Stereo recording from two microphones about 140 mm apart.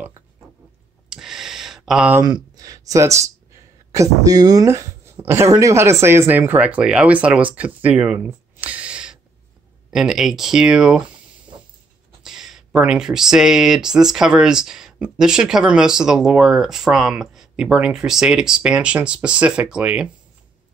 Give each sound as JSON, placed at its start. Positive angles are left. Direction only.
{"t": 1.1, "sound": "a sound", "side_deg": -5}
{"t": 2.2, "sound": "speech", "side_deg": -30}
{"t": 12.2, "sound": "speech", "side_deg": -5}